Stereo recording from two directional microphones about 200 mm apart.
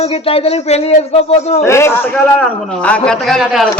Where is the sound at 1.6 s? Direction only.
15° left (ahead or behind).